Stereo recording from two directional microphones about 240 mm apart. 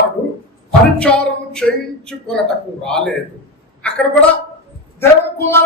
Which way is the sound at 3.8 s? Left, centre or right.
Centre.